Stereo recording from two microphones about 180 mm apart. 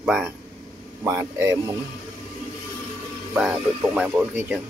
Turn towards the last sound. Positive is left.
turn(degrees=-10)  # may be behind; listen again after turning